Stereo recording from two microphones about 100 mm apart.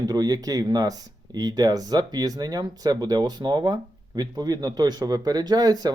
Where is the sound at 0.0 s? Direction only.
40° right (ahead or behind).